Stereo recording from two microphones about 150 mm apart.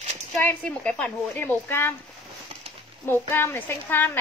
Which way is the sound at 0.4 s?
10° left (ahead or behind).